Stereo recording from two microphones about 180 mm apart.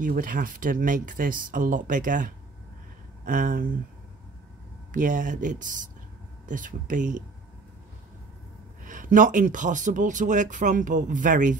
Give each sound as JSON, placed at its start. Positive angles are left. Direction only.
{"t": 0.0, "sound": "speech", "side_deg": -50}
{"t": 4.9, "sound": "speech", "side_deg": -45}
{"t": 8.8, "sound": "speech", "side_deg": -45}